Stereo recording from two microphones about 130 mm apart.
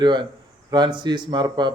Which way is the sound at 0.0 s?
35° right (ahead or behind).